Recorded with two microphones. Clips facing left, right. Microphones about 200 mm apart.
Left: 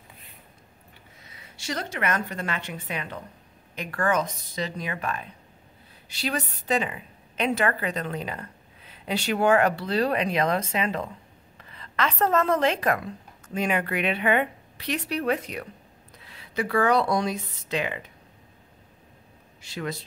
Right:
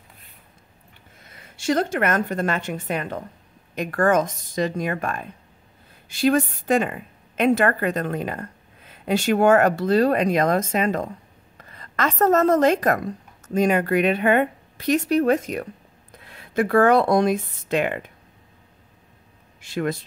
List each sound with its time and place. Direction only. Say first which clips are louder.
1.2 s a woman's voice: right 12 dB; 50° right (ahead or behind)
19.6 s a woman's voice: right 7 dB; 55° right (ahead or behind)